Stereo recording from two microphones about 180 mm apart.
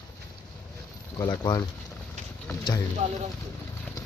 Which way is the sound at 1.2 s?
25° left (ahead or behind).